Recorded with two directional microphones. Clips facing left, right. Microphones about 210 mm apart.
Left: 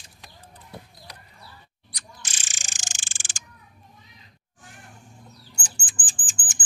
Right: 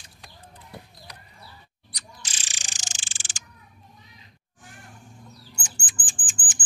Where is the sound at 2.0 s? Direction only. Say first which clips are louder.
Even; 45° left (ahead or behind).